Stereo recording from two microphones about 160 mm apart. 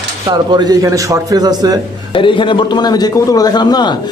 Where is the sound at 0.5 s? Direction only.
25° right (ahead or behind).